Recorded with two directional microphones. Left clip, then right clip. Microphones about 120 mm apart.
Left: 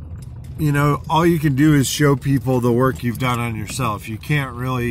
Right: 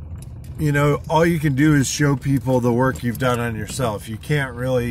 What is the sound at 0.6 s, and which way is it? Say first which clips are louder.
Speech: even; 5° left (ahead or behind).